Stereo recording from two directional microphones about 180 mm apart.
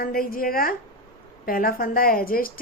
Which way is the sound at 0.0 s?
55° left (ahead or behind).